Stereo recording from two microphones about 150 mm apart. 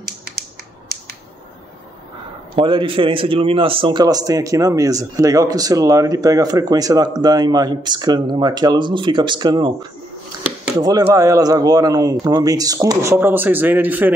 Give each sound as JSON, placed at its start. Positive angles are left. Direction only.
{"t": 2.5, "sound": "a man's voice", "side_deg": -35}